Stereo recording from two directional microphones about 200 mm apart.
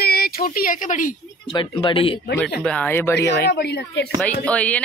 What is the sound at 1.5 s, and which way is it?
Speech, 25° left (ahead or behind).